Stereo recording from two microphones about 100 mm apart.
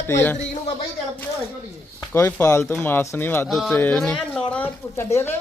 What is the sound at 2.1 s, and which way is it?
Speech, 30° left (ahead or behind).